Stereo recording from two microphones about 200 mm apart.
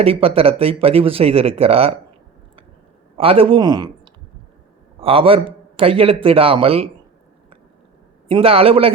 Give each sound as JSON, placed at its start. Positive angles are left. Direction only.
{"t": 0.0, "sound": "speech", "side_deg": -30}
{"t": 3.2, "sound": "speech", "side_deg": -30}
{"t": 8.3, "sound": "speech", "side_deg": -30}